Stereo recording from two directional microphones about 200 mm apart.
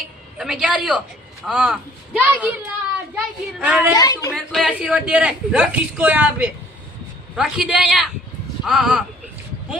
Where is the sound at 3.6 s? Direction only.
5° right (ahead or behind).